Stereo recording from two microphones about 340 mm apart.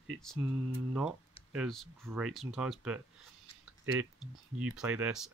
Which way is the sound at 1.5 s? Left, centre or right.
Centre.